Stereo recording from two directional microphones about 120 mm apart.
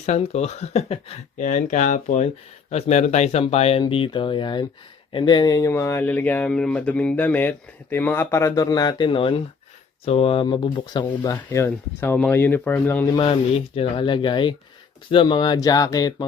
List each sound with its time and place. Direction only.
0.0 s speech: 70° left (ahead or behind)
1.4 s speech: 90° left
2.6 s speech: 60° left (ahead or behind)
10.4 s speech: 40° left (ahead or behind); by 13.1 s 15° left (ahead or behind)
13.2 s speech: 50° left (ahead or behind); by 16.2 s 30° left (ahead or behind)